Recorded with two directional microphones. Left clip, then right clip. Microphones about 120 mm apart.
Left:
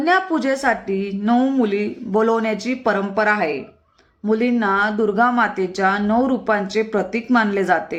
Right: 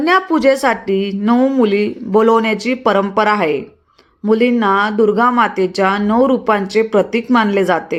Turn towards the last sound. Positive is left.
turn(degrees=-25)  # may be behind; listen again after turning